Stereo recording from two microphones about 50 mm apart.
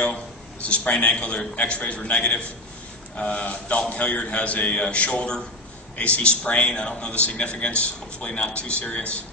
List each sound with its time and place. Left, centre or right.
0.0 s a man's voice: left